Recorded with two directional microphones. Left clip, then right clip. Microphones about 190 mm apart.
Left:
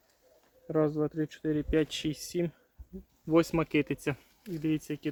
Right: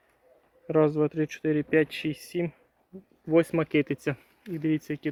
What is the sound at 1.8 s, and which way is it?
Speech, 15° left (ahead or behind).